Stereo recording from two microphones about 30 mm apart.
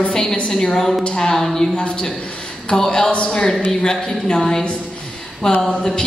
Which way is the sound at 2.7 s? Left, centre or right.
Centre.